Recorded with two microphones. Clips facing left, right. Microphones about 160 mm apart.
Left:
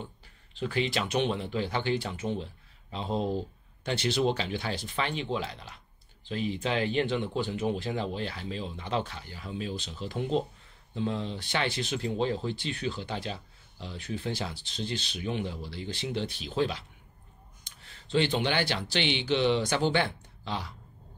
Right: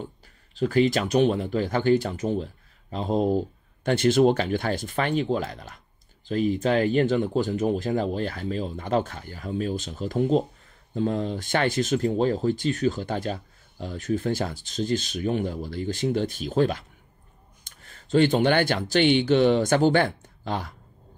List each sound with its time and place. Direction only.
0.6 s speech: 45° right (ahead or behind)